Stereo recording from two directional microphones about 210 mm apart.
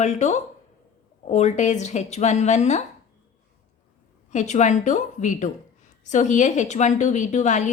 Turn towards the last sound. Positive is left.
turn(degrees=35)  # may be behind; listen again after turning